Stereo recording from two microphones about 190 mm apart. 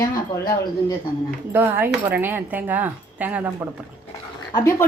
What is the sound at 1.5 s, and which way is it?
Speech, 10° right (ahead or behind).